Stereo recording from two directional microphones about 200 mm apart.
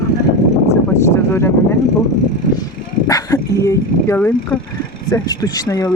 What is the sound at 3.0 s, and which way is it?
Speech, 15° left (ahead or behind).